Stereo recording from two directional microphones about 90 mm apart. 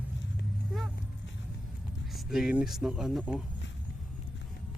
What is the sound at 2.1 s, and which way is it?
Vehicle, centre (ahead or behind).